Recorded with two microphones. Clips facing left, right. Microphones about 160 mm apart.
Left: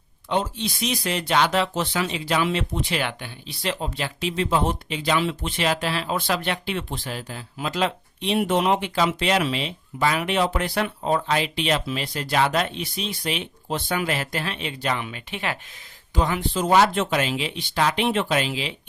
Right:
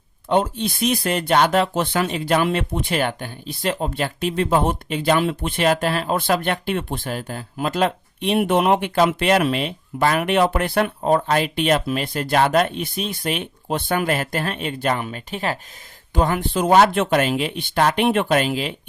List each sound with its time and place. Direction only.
0.3 s speech: 55° right (ahead or behind)
16.1 s speech: 55° right (ahead or behind)